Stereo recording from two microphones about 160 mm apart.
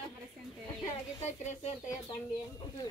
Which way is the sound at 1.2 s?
45° left (ahead or behind).